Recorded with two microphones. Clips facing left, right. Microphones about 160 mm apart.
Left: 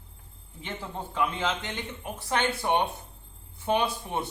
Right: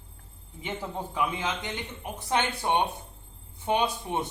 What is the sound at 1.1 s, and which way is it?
A man's voice, 15° right (ahead or behind).